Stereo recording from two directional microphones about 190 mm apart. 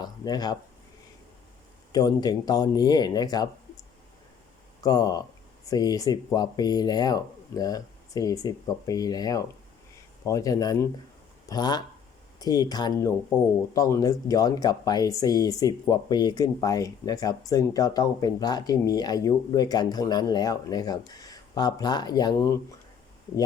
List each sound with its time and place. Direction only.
0.0 s speech: 20° left (ahead or behind)
1.9 s speech: 20° left (ahead or behind)
4.8 s speech: 20° left (ahead or behind)